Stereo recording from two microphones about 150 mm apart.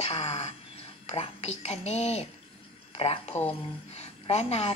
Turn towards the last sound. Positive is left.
turn(degrees=40)  # may be behind; listen again after turning